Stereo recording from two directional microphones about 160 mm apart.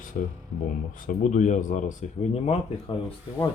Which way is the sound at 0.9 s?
55° left (ahead or behind).